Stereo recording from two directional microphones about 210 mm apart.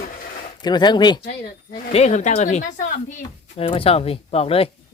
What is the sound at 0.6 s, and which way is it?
Speech, 20° left (ahead or behind).